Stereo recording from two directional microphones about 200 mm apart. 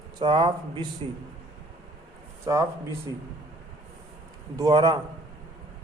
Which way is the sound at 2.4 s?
15° right (ahead or behind).